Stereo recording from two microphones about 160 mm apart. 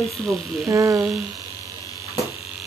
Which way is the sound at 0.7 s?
20° right (ahead or behind).